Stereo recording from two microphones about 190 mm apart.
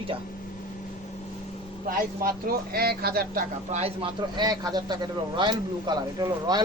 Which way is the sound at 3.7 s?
30° right (ahead or behind).